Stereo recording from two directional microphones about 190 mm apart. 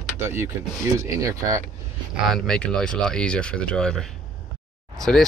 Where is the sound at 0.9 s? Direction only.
15° right (ahead or behind).